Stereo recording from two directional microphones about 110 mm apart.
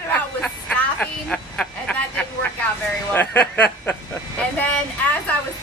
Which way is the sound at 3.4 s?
10° left (ahead or behind).